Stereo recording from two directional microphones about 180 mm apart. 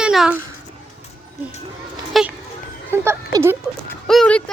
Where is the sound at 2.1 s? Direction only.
Centre (ahead or behind).